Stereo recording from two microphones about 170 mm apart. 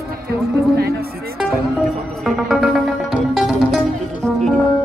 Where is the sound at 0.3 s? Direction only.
70° right (ahead or behind).